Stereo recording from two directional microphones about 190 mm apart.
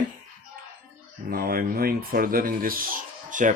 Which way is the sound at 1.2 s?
50° right (ahead or behind).